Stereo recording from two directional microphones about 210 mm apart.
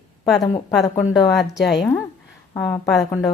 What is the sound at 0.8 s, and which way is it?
Speech, 15° left (ahead or behind).